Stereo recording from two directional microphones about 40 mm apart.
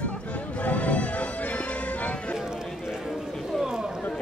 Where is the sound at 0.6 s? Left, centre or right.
Left.